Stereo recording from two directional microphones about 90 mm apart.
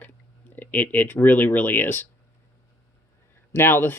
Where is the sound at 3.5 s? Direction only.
25° left (ahead or behind).